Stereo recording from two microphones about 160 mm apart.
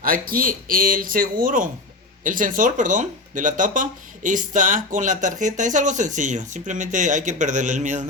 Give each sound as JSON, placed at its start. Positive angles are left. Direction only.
{"t": 0.0, "sound": "speech", "side_deg": -65}